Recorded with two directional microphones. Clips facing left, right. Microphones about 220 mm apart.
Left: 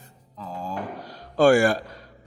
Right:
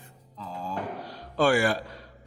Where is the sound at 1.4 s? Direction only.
45° left (ahead or behind).